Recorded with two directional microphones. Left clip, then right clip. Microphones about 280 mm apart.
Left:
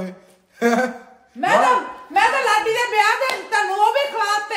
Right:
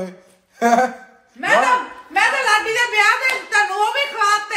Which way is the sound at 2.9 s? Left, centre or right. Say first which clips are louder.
Right 3 dB; left.